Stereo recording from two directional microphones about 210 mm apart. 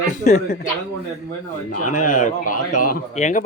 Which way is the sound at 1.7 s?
35° left (ahead or behind).